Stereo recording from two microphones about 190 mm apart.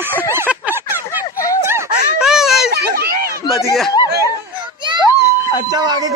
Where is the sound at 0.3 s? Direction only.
10° right (ahead or behind).